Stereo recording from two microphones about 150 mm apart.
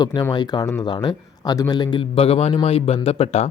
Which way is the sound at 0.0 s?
25° left (ahead or behind).